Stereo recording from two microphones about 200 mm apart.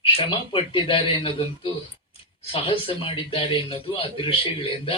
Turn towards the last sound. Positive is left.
turn(degrees=25)  # may be behind; listen again after turning